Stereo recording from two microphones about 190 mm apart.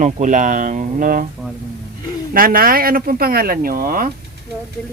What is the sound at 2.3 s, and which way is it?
Speech, 50° right (ahead or behind).